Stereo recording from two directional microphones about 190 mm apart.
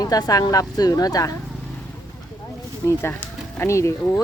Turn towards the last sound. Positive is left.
turn(degrees=15)  # may be behind; listen again after turning